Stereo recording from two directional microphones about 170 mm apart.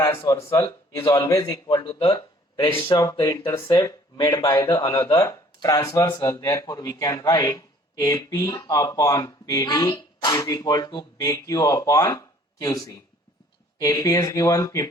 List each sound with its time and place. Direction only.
0.0 s a man's voice: 15° left (ahead or behind)